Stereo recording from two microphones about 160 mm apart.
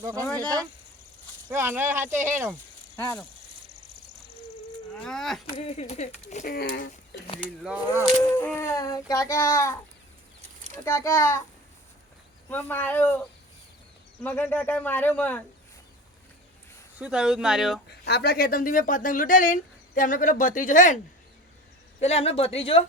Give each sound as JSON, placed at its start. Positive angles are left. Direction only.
{"t": 0.0, "sound": "speech", "side_deg": -15}
{"t": 2.9, "sound": "speech", "side_deg": 15}
{"t": 4.9, "sound": "speech", "side_deg": 5}
{"t": 5.5, "sound": "speech", "side_deg": 40}
{"t": 7.4, "sound": "speech", "side_deg": -10}
{"t": 8.4, "sound": "a child's voice", "side_deg": 15}
{"t": 10.8, "sound": "speech", "side_deg": 15}
{"t": 12.5, "sound": "speech", "side_deg": 10}
{"t": 14.3, "sound": "speech", "side_deg": 10}
{"t": 17.0, "sound": "speech", "side_deg": -5}
{"t": 18.0, "sound": "speech", "side_deg": 80}
{"t": 22.0, "sound": "speech", "side_deg": 40}